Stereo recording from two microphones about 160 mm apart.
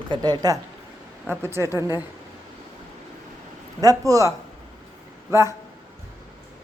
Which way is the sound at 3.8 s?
20° right (ahead or behind).